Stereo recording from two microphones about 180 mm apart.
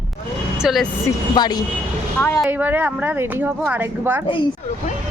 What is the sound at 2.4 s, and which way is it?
A woman's voice, 10° right (ahead or behind).